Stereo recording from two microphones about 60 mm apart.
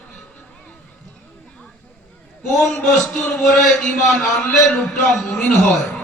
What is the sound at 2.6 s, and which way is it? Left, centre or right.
A man's voice, centre.